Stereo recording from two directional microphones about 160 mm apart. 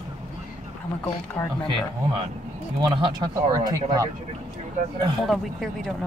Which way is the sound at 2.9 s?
25° right (ahead or behind).